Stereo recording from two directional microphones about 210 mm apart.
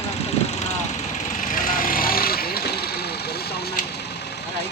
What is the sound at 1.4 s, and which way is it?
Vehicle, 40° left (ahead or behind).